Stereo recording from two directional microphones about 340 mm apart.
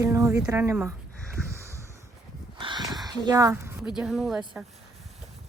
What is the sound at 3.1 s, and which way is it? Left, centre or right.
Speech, centre.